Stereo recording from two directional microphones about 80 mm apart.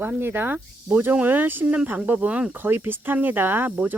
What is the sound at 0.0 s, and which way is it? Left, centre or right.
Speech, right.